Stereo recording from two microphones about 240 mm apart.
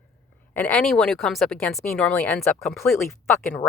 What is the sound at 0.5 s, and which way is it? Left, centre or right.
A woman's voice, centre.